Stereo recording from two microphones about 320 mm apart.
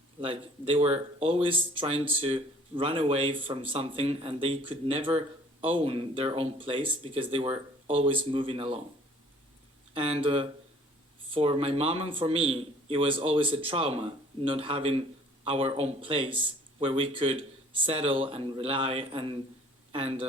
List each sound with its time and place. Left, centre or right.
0.2 s speech: centre
9.9 s speech: centre